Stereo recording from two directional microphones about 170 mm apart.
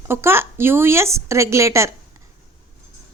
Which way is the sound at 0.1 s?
15° right (ahead or behind).